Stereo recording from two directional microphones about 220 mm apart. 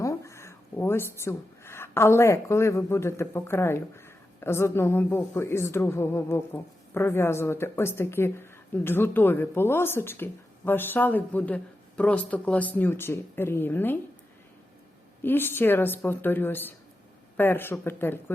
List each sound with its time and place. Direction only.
0.0 s speech: 15° left (ahead or behind)
15.2 s speech: 10° left (ahead or behind)